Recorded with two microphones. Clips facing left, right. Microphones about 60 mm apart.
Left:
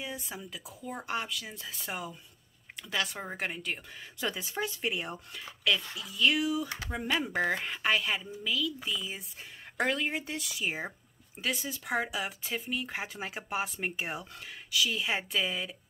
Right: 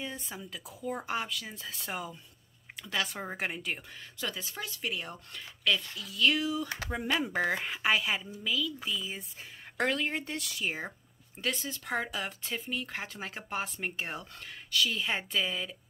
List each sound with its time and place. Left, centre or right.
0.0 s speech: centre
4.2 s speech: centre
5.3 s speech: centre